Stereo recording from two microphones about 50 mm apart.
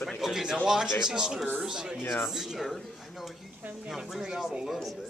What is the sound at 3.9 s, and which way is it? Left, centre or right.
Speech, centre.